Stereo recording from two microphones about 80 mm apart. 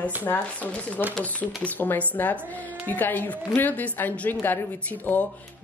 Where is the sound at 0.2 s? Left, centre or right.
Left.